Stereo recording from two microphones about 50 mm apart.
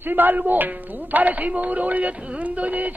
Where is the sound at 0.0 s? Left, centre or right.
Right.